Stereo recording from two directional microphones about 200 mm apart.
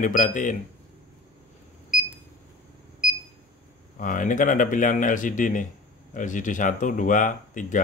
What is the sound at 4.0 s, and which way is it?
Speech, 40° left (ahead or behind).